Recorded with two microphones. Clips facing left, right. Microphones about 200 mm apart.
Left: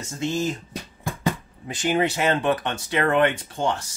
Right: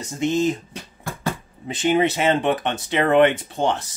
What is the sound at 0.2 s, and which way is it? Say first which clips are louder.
Speech: right 5 dB; 20° right (ahead or behind).